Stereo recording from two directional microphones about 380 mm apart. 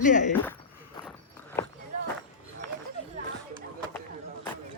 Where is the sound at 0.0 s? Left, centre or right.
Centre.